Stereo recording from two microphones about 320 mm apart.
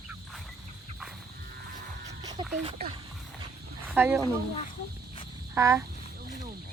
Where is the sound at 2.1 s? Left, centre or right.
Centre.